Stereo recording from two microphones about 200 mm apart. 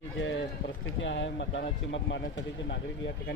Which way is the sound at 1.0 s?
65° left (ahead or behind).